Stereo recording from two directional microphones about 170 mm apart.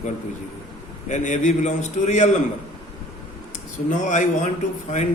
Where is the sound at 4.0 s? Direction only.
45° left (ahead or behind).